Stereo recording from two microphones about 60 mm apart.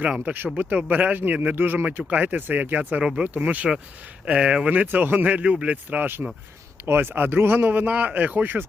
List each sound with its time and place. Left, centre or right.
0.0 s speech: right
3.0 s speech: centre
3.2 s speech: right